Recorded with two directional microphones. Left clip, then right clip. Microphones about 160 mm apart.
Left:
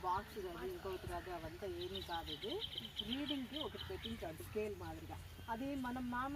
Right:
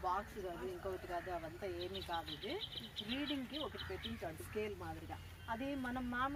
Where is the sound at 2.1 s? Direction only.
20° right (ahead or behind).